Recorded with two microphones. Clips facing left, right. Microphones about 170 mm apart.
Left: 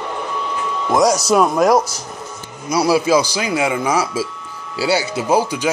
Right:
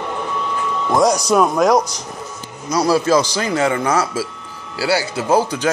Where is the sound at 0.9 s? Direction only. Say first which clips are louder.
Left 1 dB; 5° left (ahead or behind).